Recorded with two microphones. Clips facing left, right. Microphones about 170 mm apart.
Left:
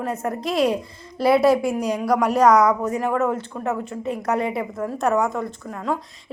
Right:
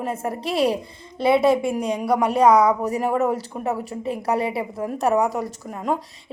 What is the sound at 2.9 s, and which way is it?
Speech, 15° right (ahead or behind).